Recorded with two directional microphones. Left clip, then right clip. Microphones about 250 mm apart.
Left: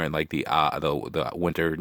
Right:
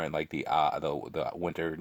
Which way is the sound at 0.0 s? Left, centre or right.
Left.